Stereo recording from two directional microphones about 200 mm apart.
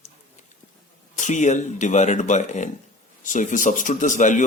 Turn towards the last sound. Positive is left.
turn(degrees=40)  # may be behind; listen again after turning